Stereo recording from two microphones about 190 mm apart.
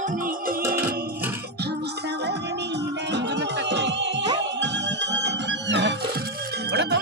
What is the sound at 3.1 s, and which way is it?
Music, 65° right (ahead or behind).